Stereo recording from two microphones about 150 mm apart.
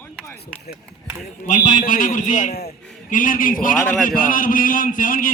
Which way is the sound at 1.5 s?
55° left (ahead or behind).